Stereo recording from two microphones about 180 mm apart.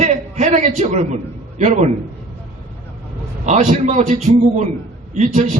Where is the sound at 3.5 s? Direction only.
40° right (ahead or behind).